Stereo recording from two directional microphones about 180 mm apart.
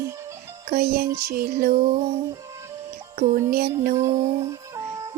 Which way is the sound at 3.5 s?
55° right (ahead or behind).